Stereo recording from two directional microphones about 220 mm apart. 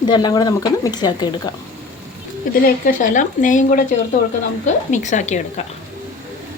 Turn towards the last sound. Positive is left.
turn(degrees=30)  # may be behind; listen again after turning